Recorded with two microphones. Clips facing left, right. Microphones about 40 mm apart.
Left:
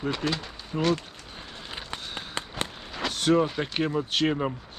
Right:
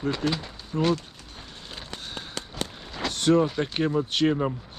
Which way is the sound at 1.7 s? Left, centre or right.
Left.